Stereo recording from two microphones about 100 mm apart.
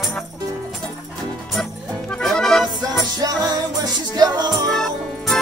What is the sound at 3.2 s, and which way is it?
Music, 40° right (ahead or behind).